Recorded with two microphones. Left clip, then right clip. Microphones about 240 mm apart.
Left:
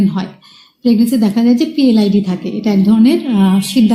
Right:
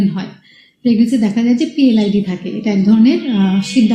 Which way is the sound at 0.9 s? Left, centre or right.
Left.